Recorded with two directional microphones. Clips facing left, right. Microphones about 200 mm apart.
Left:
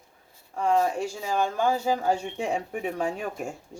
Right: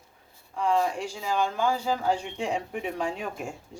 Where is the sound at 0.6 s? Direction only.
45° left (ahead or behind).